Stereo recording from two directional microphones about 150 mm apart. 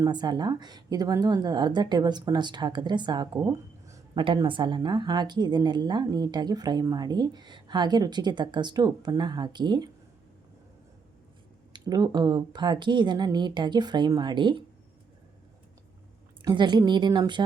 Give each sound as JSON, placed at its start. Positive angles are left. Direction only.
{"t": 0.0, "sound": "a woman's voice", "side_deg": -30}
{"t": 3.3, "sound": "speech", "side_deg": -20}
{"t": 4.1, "sound": "a woman's voice", "side_deg": -30}
{"t": 11.7, "sound": "a woman's voice", "side_deg": -25}
{"t": 16.4, "sound": "a woman's voice", "side_deg": -30}